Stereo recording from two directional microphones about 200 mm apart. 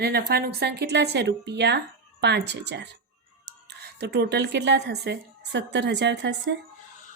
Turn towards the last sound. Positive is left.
turn(degrees=-60)  # may be behind; listen again after turning